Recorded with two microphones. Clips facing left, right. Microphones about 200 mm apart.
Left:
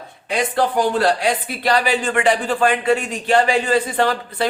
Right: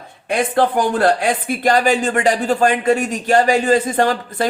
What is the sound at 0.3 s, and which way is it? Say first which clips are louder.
Speech: right 2 dB; 50° right (ahead or behind).